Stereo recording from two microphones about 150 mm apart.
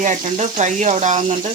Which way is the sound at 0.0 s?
50° right (ahead or behind).